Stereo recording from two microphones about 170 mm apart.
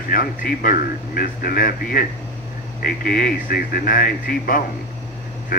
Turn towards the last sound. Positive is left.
turn(degrees=55)  # may be behind; listen again after turning